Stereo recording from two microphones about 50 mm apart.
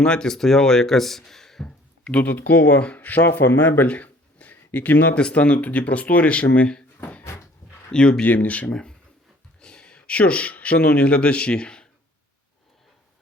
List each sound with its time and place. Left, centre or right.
0.0 s speech: centre
2.0 s speech: left
3.2 s speech: left
3.8 s a sound: left
5.1 s speech: left
7.9 s speech: centre
8.2 s speech: left
8.7 s speech: centre